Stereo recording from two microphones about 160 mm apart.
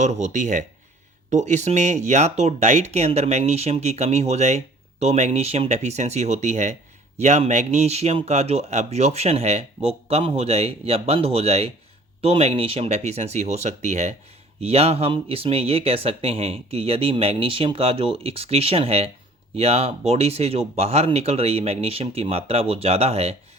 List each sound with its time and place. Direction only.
0.0 s speech: 45° right (ahead or behind)